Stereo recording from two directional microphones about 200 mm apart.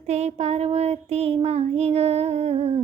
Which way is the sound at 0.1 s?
35° right (ahead or behind).